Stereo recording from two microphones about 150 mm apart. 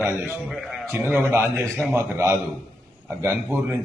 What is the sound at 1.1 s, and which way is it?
Speech, 15° right (ahead or behind).